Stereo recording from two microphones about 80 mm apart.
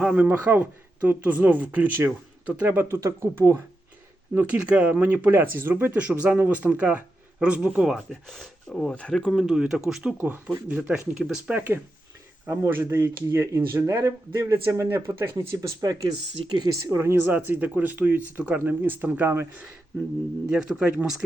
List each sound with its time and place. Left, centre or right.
0.0 s speech: centre; by 3.6 s right
4.4 s speech: centre
7.9 s speech: centre
9.5 s speech: centre
11.5 s speech: right
14.3 s speech: right
15.5 s speech: right
16.4 s speech: right
16.9 s speech: right
17.3 s speech: right
20.5 s speech: centre